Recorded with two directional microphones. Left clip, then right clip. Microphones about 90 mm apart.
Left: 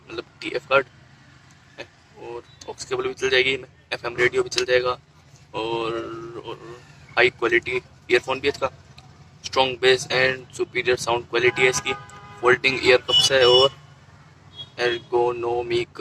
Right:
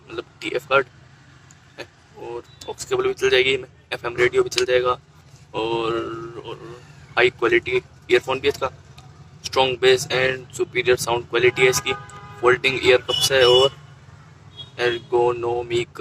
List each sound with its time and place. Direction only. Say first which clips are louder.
0.1 s vehicle: right 2 dB; 20° left (ahead or behind)
1.7 s speech: right 2 dB; 20° left (ahead or behind)